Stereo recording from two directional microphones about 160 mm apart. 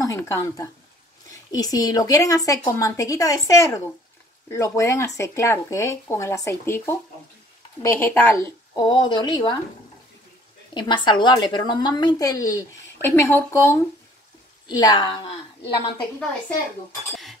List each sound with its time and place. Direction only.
0.0 s a woman's voice: 20° left (ahead or behind)
8.7 s a woman's voice: 25° left (ahead or behind)
10.7 s a woman's voice: 30° left (ahead or behind)